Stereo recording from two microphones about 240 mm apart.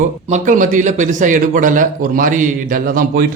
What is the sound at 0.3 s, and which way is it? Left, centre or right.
A man's voice, right.